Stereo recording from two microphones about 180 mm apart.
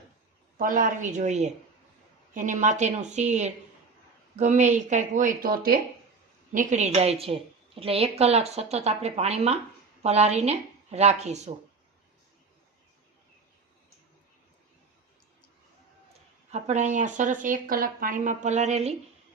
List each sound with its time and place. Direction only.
0.6 s a woman's voice: 50° right (ahead or behind)
6.5 s a woman's voice: 45° right (ahead or behind)
16.5 s speech: 40° right (ahead or behind)